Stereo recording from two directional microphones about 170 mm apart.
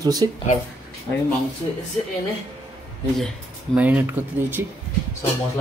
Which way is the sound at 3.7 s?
10° right (ahead or behind).